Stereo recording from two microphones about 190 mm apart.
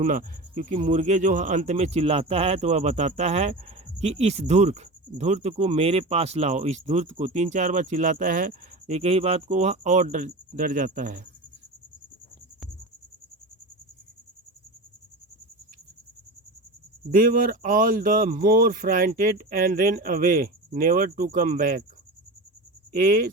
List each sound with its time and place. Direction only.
0.0 s speech: 45° right (ahead or behind)
17.2 s speech: 50° right (ahead or behind)
22.9 s speech: 45° right (ahead or behind)